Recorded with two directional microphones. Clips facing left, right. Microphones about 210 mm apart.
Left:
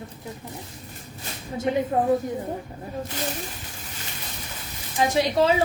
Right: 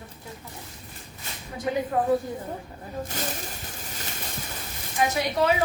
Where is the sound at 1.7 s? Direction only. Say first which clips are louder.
Left 3 dB; 25° left (ahead or behind).